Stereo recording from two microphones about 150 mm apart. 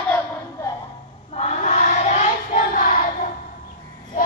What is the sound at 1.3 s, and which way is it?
Child singing, 45° left (ahead or behind).